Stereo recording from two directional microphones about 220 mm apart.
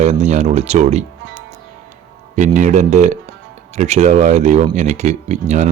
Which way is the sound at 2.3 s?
35° right (ahead or behind).